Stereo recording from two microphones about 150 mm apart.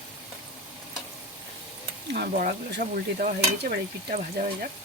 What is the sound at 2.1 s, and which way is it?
Speech, 80° right.